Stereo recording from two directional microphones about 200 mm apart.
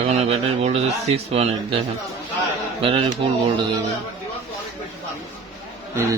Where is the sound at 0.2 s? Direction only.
30° right (ahead or behind).